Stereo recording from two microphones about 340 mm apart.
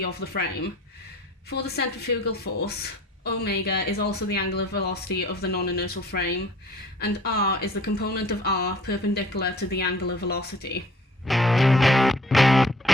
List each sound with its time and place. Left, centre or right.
0.0 s speech: left
1.5 s speech: left
11.3 s music: centre